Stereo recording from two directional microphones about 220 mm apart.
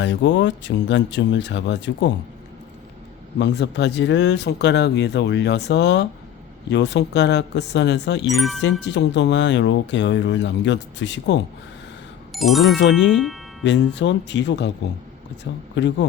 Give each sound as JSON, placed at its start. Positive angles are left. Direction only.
{"t": 0.0, "sound": "speech", "side_deg": 55}
{"t": 3.3, "sound": "speech", "side_deg": 50}
{"t": 8.3, "sound": "speech", "side_deg": 0}
{"t": 8.8, "sound": "speech", "side_deg": 55}
{"t": 12.3, "sound": "speech", "side_deg": 0}
{"t": 13.7, "sound": "speech", "side_deg": 55}
{"t": 15.7, "sound": "speech", "side_deg": 55}